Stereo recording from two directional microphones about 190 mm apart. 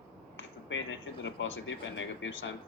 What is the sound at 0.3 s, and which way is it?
Speech, 85° left.